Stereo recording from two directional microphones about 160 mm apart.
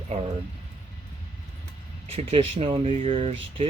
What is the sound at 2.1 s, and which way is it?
Speech, 40° right (ahead or behind).